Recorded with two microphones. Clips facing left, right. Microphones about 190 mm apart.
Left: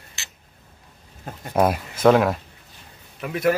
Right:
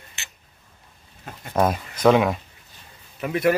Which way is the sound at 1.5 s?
5° left (ahead or behind).